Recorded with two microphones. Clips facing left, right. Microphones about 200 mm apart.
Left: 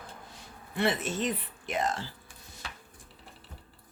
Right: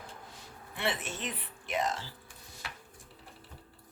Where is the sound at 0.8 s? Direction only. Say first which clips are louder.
Left 6 dB; 40° left (ahead or behind).